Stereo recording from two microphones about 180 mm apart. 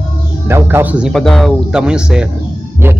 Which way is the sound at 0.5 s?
15° right (ahead or behind).